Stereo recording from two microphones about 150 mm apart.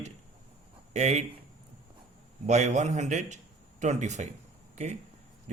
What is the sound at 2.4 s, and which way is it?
Speech, 50° right (ahead or behind).